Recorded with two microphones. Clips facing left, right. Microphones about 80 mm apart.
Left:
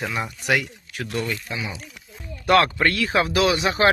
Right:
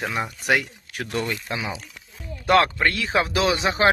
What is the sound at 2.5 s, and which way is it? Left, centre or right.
Speech, right.